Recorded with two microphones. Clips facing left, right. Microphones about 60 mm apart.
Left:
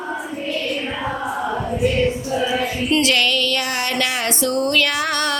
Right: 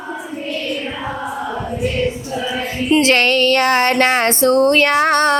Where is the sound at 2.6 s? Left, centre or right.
Right.